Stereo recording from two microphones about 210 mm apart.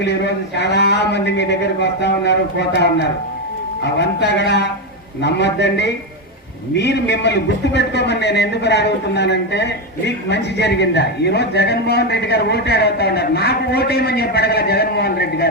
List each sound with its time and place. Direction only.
0.0 s a man's voice: 55° left (ahead or behind)